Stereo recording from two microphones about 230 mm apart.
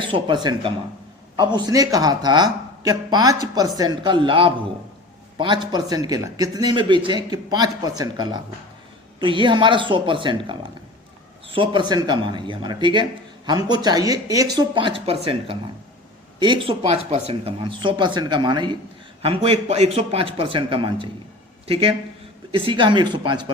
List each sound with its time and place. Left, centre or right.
0.0 s speech: right
1.4 s speech: centre